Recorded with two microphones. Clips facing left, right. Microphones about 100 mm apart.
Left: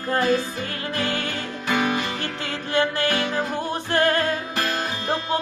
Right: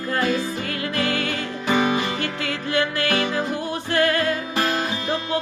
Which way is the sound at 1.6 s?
15° right (ahead or behind).